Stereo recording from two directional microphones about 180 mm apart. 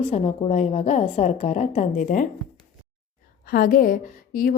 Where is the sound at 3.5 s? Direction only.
50° left (ahead or behind).